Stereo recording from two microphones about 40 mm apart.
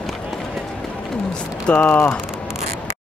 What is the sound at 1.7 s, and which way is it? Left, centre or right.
Speech, left.